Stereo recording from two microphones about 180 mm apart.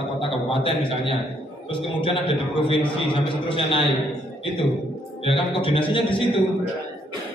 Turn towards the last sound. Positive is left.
turn(degrees=30)  # may be behind; listen again after turning